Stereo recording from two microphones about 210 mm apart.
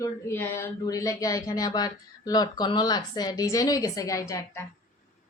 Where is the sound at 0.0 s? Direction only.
10° left (ahead or behind).